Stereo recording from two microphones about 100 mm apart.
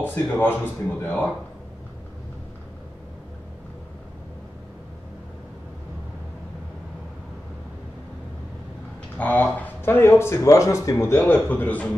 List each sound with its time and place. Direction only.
0.0 s speech: 20° left (ahead or behind)
9.2 s a man's voice: 15° left (ahead or behind)